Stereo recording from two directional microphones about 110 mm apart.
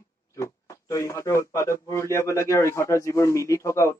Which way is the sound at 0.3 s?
25° left (ahead or behind).